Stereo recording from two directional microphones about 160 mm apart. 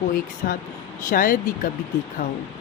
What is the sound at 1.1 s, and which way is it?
Speech, 60° left (ahead or behind).